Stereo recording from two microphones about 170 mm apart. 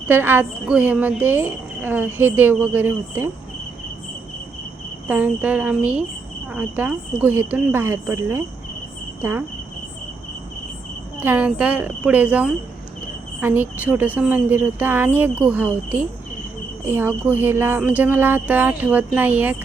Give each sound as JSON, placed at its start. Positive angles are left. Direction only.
{"t": 0.1, "sound": "a woman's voice", "side_deg": -10}
{"t": 5.0, "sound": "a woman's voice", "side_deg": -10}
{"t": 11.2, "sound": "a woman's voice", "side_deg": -10}
{"t": 16.8, "sound": "a woman's voice", "side_deg": -10}